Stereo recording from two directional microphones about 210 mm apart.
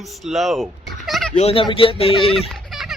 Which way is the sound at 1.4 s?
30° left (ahead or behind).